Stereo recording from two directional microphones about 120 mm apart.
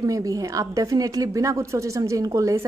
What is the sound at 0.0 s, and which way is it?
A woman's voice, 30° right (ahead or behind).